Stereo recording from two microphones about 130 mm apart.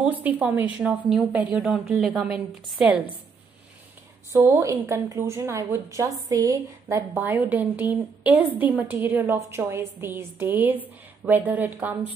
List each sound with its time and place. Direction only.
0.0 s a woman's voice: 10° right (ahead or behind)
4.3 s a woman's voice: 20° right (ahead or behind)